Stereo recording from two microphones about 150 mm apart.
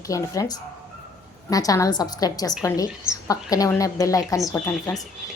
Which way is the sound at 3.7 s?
20° left (ahead or behind).